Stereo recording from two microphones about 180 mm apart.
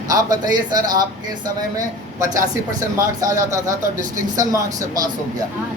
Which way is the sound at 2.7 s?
20° right (ahead or behind).